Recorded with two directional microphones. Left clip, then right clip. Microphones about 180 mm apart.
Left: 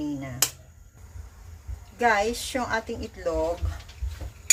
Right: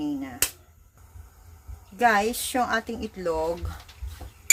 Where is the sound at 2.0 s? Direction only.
70° right (ahead or behind).